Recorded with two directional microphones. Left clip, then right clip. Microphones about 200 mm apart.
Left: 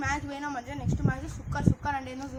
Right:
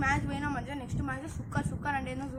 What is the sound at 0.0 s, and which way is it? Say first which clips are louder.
Speech: right 1 dB; 5° right (ahead or behind).